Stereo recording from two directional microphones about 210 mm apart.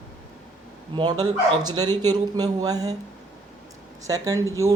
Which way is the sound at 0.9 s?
20° right (ahead or behind).